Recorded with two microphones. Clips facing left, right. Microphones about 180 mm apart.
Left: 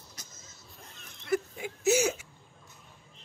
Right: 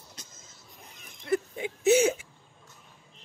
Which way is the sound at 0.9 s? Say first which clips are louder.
Right 3 dB; 15° right (ahead or behind).